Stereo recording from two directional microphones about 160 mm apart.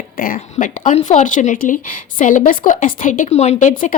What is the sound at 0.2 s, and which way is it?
Speech, 60° left (ahead or behind).